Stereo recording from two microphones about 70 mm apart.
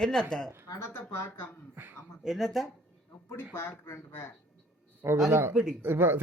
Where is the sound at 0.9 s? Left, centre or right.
Left.